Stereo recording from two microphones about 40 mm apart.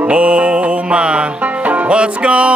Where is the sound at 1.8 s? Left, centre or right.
Right.